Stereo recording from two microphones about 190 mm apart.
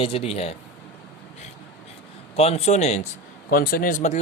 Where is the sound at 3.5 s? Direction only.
50° left (ahead or behind).